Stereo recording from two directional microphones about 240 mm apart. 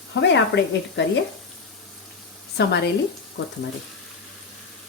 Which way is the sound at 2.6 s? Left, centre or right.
Left.